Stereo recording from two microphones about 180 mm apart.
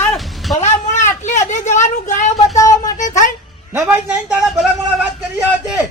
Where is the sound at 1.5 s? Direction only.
40° left (ahead or behind).